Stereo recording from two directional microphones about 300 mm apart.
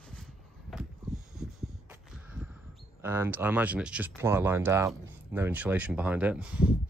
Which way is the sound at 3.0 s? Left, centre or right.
Centre.